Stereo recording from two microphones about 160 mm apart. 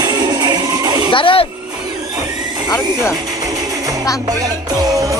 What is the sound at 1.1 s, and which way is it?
Speech, 35° left (ahead or behind).